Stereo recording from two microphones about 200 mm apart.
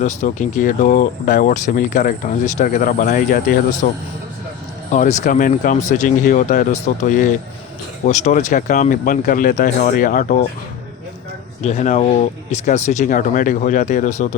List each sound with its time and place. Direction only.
0.0 s speech: 40° left (ahead or behind)
4.9 s speech: 35° left (ahead or behind)
11.6 s speech: 35° left (ahead or behind)